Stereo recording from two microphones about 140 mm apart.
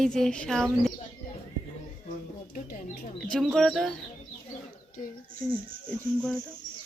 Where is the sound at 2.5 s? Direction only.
70° left (ahead or behind).